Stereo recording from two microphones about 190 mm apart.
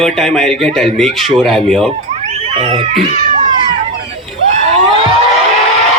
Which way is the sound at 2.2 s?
35° right (ahead or behind).